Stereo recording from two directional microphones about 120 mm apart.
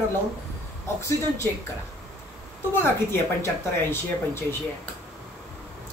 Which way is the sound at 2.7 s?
20° left (ahead or behind).